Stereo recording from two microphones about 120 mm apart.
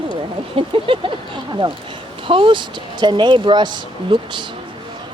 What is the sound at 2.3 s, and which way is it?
Speech, 45° right (ahead or behind).